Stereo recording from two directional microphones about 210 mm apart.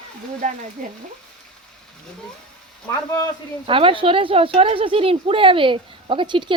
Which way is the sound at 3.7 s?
25° right (ahead or behind).